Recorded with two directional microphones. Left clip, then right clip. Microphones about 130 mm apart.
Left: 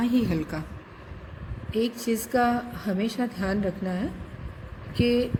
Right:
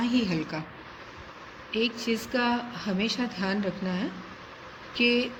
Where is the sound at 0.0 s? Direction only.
60° left (ahead or behind).